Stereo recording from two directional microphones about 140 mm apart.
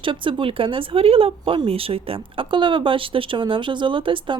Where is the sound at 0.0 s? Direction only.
35° right (ahead or behind).